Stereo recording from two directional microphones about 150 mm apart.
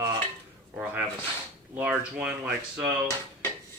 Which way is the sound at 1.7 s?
10° right (ahead or behind).